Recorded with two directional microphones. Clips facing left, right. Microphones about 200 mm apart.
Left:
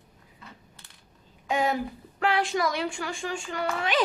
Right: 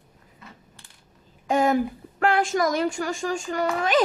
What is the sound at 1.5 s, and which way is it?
A woman's voice, 45° right (ahead or behind).